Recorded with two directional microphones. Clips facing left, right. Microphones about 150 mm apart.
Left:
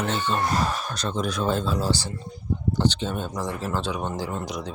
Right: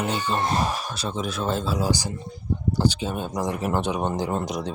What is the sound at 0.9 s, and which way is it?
Speech, 5° right (ahead or behind).